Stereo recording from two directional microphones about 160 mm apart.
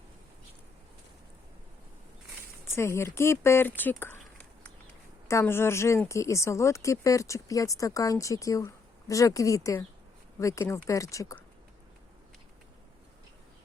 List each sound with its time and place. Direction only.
2.6 s speech: 15° left (ahead or behind)
5.3 s a woman's voice: 15° left (ahead or behind)